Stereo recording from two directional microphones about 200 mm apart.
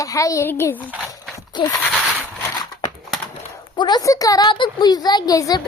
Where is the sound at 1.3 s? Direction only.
20° left (ahead or behind).